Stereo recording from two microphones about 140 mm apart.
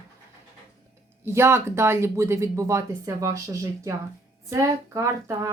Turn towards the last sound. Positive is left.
turn(degrees=-20)  # may be behind; listen again after turning